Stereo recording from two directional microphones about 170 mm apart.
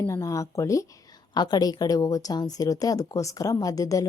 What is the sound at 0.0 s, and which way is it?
Speech, 20° left (ahead or behind).